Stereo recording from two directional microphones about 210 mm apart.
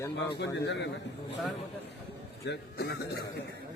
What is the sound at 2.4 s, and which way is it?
Speech, 50° left (ahead or behind).